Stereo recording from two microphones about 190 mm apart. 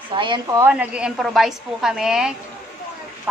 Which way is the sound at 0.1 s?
25° right (ahead or behind).